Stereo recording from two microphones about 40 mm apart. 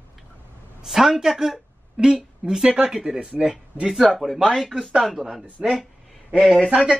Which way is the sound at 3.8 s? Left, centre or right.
Centre.